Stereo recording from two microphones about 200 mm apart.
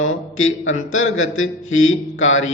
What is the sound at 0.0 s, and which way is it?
Speech, 90° left.